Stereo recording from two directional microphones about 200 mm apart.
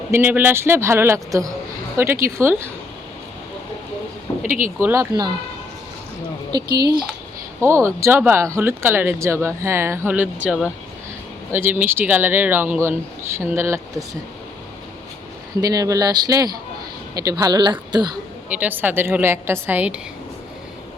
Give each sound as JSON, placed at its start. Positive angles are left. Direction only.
{"t": 0.1, "sound": "speech", "side_deg": -10}
{"t": 4.4, "sound": "speech", "side_deg": -40}
{"t": 4.8, "sound": "speech", "side_deg": -15}
{"t": 6.7, "sound": "speech", "side_deg": -50}
{"t": 7.6, "sound": "speech", "side_deg": -15}
{"t": 15.6, "sound": "a woman's voice", "side_deg": -20}
{"t": 18.4, "sound": "speech", "side_deg": -5}